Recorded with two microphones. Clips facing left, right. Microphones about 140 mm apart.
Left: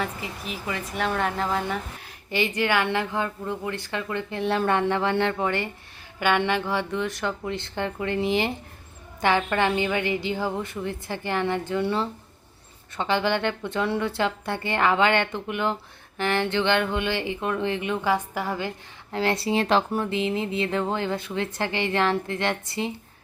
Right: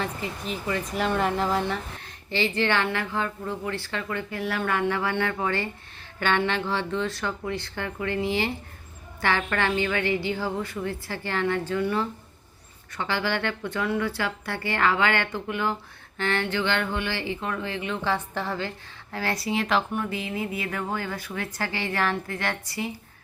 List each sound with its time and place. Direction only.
0.5 s speech: centre (ahead or behind); by 22.9 s 25° left (ahead or behind)